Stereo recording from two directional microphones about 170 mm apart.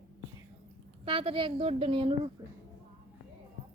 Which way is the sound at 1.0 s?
35° right (ahead or behind).